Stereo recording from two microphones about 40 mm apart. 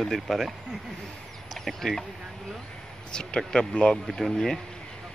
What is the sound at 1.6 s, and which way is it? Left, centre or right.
Speech, centre.